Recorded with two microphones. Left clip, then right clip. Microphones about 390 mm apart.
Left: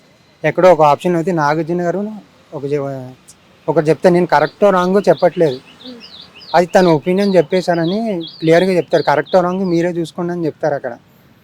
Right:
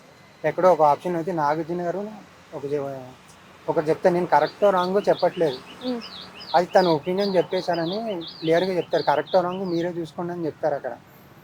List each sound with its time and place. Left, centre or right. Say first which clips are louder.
0.4 s speech: left 8 dB; left
3.7 s speech: left 9 dB; left
6.5 s speech: left 7 dB; left